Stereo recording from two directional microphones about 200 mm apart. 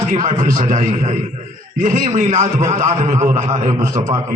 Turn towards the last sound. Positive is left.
turn(degrees=-35)  # may be behind; listen again after turning